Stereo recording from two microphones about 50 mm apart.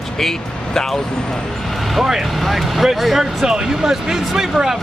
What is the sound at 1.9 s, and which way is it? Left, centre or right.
Speech, centre.